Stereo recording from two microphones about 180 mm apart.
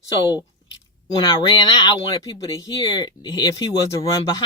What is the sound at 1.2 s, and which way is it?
Speech, 25° left (ahead or behind).